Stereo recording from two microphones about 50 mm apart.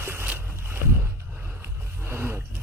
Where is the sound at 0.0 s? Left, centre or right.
Right.